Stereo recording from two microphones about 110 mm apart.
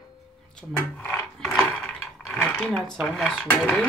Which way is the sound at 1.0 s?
20° left (ahead or behind).